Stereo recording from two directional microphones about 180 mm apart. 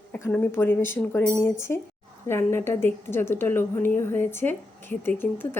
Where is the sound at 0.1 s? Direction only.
10° left (ahead or behind).